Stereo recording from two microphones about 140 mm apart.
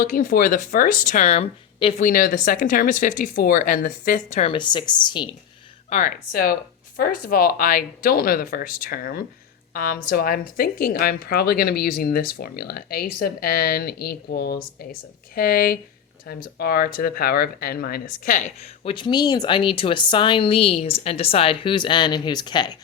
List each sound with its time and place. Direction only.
0.0 s speech: 85° left; by 2.0 s 45° left (ahead or behind)
2.0 s speech: 85° left
4.3 s speech: 50° left (ahead or behind)
4.5 s speech: 35° left (ahead or behind)
5.9 s speech: 75° left (ahead or behind)
18.6 s speech: 40° left (ahead or behind)